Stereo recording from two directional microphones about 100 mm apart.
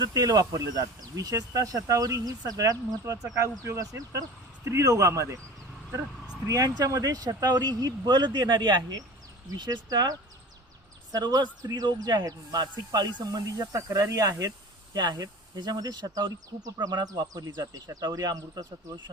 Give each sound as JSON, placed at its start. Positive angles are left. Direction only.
{"t": 0.0, "sound": "speech", "side_deg": -40}
{"t": 6.5, "sound": "speech", "side_deg": -35}